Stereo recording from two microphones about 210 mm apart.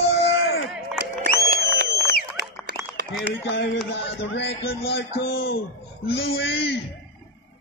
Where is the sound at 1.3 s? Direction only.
45° left (ahead or behind).